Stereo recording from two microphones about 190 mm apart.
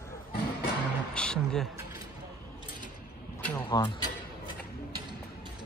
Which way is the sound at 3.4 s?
10° left (ahead or behind).